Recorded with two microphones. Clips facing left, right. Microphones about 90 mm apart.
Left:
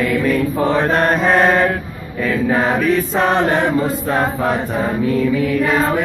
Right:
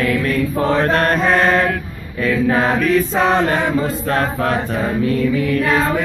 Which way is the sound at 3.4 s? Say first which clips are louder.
Left 1 dB; 15° left (ahead or behind).